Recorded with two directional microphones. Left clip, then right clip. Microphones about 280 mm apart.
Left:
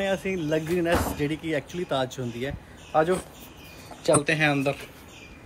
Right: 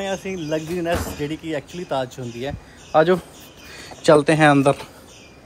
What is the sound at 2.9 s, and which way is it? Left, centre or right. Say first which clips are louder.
Speech: right 7 dB; right.